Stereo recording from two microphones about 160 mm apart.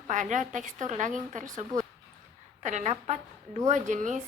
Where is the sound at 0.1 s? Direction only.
50° right (ahead or behind).